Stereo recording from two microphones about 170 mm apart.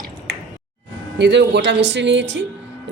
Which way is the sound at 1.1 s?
90° right.